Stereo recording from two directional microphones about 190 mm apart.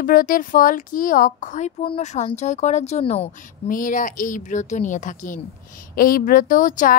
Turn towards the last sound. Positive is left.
turn(degrees=45)  # may be behind; listen again after turning